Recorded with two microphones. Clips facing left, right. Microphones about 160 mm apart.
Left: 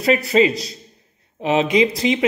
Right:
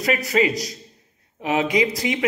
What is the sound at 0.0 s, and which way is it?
Speech, 30° left (ahead or behind).